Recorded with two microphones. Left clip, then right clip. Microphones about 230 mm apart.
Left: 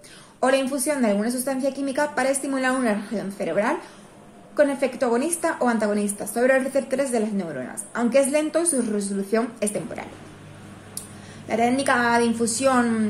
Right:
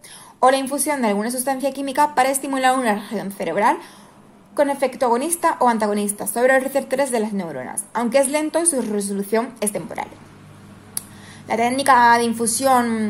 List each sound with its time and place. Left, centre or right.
0.4 s a woman's voice: right
11.0 s a sound: right
11.8 s a woman's voice: right